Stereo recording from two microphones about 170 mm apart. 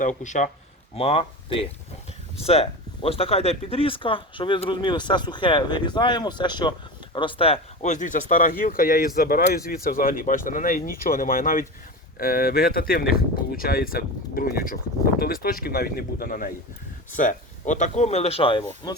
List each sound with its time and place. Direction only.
0.0 s speech: 45° left (ahead or behind)
0.9 s speech: 35° left (ahead or behind); by 16.5 s 60° left (ahead or behind)
17.2 s speech: 45° left (ahead or behind); by 19.0 s 25° left (ahead or behind)